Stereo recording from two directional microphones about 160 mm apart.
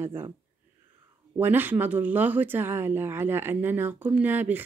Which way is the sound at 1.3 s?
10° right (ahead or behind).